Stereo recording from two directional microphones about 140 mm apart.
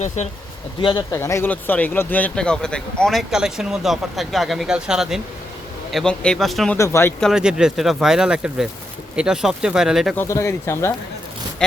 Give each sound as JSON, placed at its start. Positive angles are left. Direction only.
{"t": 0.8, "sound": "speech", "side_deg": 35}
{"t": 1.1, "sound": "speech", "side_deg": 20}
{"t": 6.7, "sound": "speech", "side_deg": 20}
{"t": 7.2, "sound": "speech", "side_deg": -5}
{"t": 10.2, "sound": "speech", "side_deg": 20}